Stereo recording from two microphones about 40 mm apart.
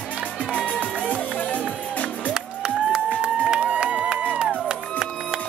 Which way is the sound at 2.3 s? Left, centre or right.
Centre.